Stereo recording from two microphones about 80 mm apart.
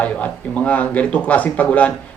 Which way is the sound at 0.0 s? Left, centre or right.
Centre.